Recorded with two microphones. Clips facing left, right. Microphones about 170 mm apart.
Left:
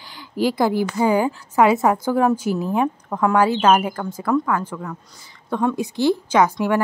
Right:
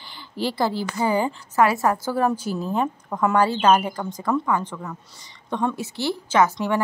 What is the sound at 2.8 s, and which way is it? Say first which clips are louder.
Speech: left 3 dB; centre (ahead or behind).